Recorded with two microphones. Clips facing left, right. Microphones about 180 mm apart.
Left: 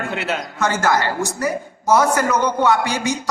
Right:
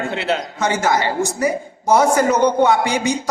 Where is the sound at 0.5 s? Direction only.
20° right (ahead or behind).